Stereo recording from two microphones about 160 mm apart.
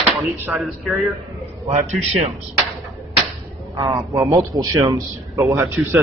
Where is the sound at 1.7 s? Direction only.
45° right (ahead or behind).